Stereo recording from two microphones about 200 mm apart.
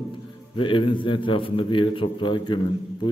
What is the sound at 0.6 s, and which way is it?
A man's voice, 25° left (ahead or behind).